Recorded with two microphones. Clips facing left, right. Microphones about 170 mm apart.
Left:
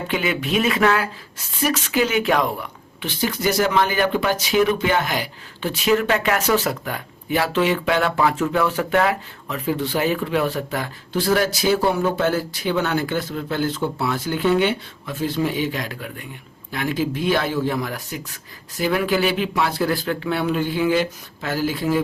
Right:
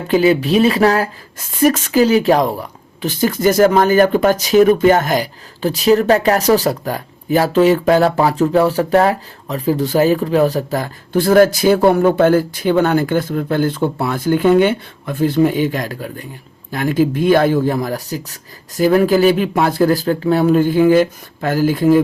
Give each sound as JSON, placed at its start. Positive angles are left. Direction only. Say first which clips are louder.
{"t": 0.1, "sound": "speech", "louder": "right 11 dB", "side_deg": -35}